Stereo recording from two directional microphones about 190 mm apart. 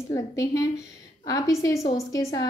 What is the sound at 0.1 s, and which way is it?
A woman's voice, 20° left (ahead or behind).